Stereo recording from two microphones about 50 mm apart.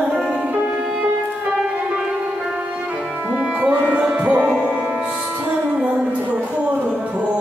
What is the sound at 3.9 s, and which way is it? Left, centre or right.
Music, right.